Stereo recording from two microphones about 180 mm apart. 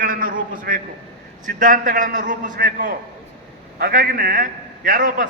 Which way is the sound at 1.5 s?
45° right (ahead or behind).